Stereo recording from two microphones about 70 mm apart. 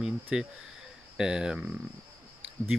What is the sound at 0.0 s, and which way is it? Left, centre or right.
Speech, centre.